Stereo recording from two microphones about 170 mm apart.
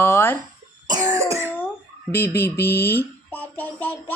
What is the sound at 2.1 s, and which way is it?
A child's voice, 15° left (ahead or behind).